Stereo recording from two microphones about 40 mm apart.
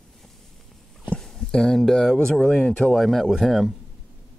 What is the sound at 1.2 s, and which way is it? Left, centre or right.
Speech, centre.